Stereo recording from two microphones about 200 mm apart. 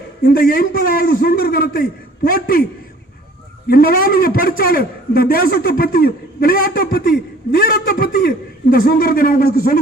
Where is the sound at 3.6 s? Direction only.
45° left (ahead or behind).